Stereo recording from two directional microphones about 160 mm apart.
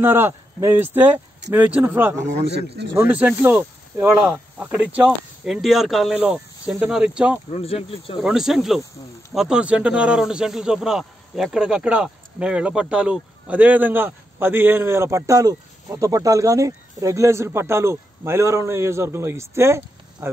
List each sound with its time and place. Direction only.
0.0 s speech: 15° right (ahead or behind)
2.4 s speech: 90° right
2.9 s speech: 10° right (ahead or behind)
7.5 s speech: 40° left (ahead or behind)
8.2 s speech: 5° right (ahead or behind)